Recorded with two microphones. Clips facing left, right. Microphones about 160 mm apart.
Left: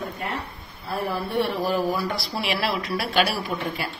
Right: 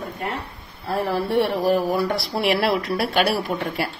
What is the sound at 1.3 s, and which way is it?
Speech, 65° right (ahead or behind).